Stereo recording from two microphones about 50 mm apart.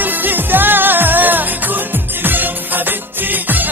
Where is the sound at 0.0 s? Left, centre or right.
Right.